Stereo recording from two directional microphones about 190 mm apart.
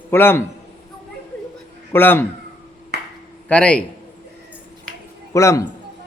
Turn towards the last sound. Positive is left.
turn(degrees=15)  # may be behind; listen again after turning